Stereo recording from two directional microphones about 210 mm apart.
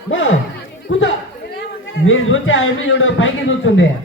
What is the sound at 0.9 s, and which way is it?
A man's voice, 60° left (ahead or behind).